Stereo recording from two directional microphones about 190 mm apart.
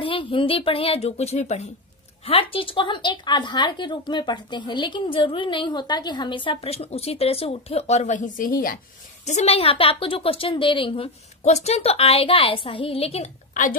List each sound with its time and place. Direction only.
0.0 s speech: 25° left (ahead or behind); by 8.7 s 45° left (ahead or behind)
9.2 s speech: 35° left (ahead or behind)